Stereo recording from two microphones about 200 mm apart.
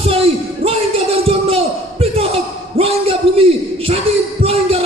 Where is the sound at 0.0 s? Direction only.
30° right (ahead or behind).